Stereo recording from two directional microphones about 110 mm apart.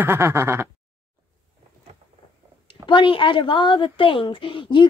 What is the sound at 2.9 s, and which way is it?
A woman's voice, 50° left (ahead or behind).